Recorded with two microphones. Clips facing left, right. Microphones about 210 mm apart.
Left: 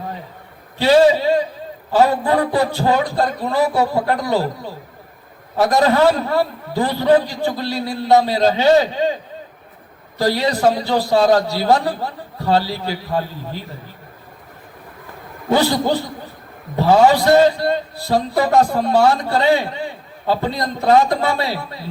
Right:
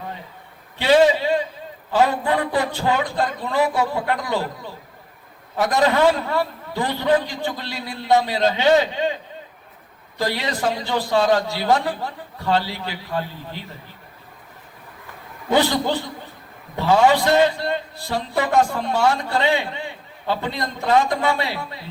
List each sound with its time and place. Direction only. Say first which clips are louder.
0.8 s a man's voice: left 3 dB; 40° left (ahead or behind)
10.2 s a man's voice: left 6 dB; 40° left (ahead or behind)
15.5 s a man's voice: left 3 dB; 40° left (ahead or behind)